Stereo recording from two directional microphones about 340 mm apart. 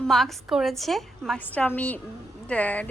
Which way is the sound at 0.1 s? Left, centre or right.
Centre.